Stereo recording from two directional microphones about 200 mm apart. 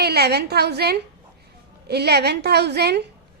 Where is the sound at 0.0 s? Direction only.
55° right (ahead or behind).